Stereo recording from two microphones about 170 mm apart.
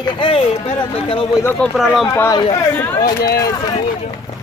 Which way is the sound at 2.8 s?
10° left (ahead or behind).